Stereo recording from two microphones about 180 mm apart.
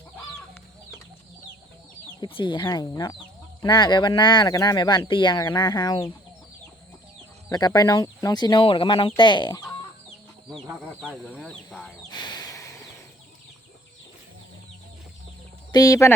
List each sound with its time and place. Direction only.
2.2 s speech: 25° left (ahead or behind)
7.5 s speech: 20° left (ahead or behind)
11.0 s speech: 5° left (ahead or behind)
12.1 s snort: 25° left (ahead or behind)
15.7 s speech: 20° left (ahead or behind)